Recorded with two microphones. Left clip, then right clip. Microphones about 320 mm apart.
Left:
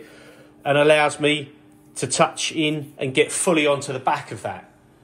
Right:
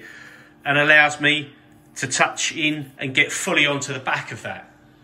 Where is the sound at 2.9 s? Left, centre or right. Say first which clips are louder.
Even; centre.